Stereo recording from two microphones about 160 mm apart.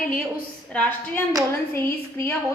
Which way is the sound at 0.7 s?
10° left (ahead or behind).